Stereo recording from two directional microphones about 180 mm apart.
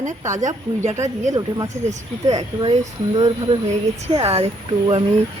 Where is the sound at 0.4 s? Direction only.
40° right (ahead or behind).